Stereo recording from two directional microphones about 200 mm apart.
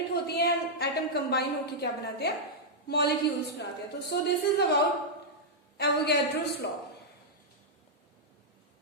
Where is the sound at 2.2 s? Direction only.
55° left (ahead or behind).